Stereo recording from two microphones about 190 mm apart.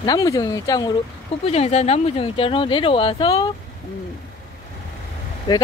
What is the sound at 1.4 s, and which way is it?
Speech, 35° left (ahead or behind).